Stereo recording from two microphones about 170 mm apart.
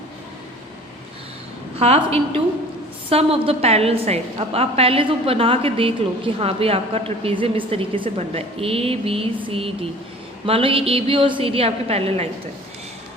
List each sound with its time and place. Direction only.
1.8 s a woman's voice: 35° right (ahead or behind)